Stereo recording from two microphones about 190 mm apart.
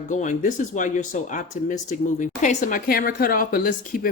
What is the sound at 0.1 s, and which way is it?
A woman's voice, 40° left (ahead or behind).